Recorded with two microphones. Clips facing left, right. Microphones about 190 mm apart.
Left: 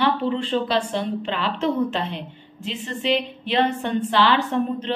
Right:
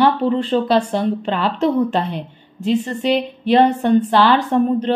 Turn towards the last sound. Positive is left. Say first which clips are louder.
# right 6 dB
turn(degrees=-45)  # may be behind; listen again after turning